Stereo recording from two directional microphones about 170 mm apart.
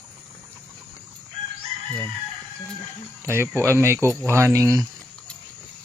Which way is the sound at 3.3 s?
15° right (ahead or behind).